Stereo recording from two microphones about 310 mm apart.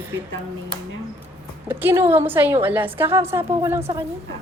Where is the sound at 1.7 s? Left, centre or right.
Centre.